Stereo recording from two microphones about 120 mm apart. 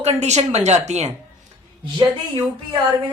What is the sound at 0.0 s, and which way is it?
A woman's voice, 65° right (ahead or behind).